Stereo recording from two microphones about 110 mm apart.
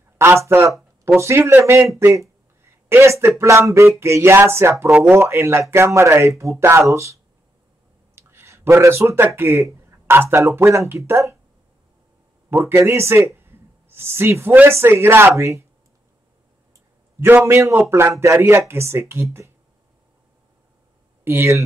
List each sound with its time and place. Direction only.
0.2 s speech: 20° right (ahead or behind)
12.4 s speech: 20° right (ahead or behind)
17.5 s speech: 25° right (ahead or behind)
21.2 s speech: 20° right (ahead or behind)